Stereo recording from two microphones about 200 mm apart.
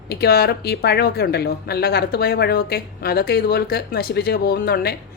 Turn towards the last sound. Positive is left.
turn(degrees=50)  # may be behind; listen again after turning